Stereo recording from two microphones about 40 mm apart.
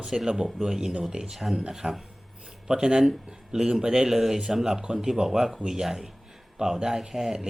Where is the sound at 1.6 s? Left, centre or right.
Right.